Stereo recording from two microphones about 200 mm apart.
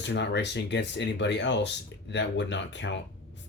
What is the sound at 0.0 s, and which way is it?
Speech, 60° left (ahead or behind).